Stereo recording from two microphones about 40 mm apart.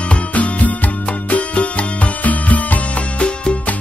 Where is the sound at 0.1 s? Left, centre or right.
Left.